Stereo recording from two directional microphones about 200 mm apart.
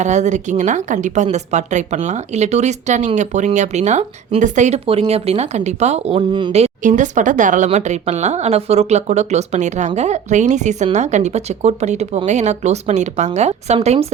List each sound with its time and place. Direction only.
0.0 s speech: 35° right (ahead or behind)